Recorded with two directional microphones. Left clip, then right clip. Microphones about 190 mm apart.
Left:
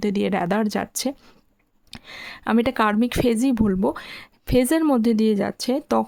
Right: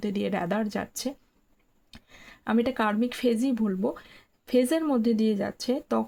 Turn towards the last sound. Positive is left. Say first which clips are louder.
# left 6 dB
turn(degrees=40)  # may be behind; listen again after turning